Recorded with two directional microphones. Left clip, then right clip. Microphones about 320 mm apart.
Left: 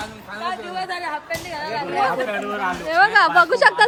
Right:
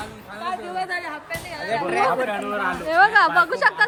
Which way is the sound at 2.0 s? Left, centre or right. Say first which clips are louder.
Even; centre.